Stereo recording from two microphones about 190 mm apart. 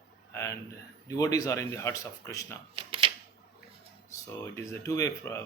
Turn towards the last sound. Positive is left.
turn(degrees=15)  # may be behind; listen again after turning